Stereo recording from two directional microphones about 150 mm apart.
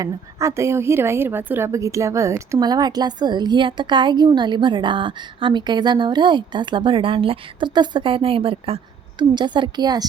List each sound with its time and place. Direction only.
0.0 s a woman's voice: 20° right (ahead or behind)